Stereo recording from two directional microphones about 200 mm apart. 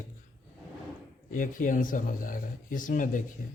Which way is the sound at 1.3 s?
40° left (ahead or behind).